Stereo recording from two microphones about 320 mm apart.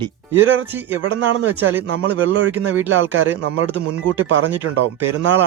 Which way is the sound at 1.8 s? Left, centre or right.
Centre.